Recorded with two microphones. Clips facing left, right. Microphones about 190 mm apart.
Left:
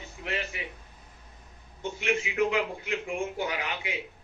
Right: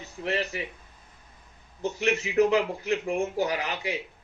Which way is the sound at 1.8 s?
40° right (ahead or behind).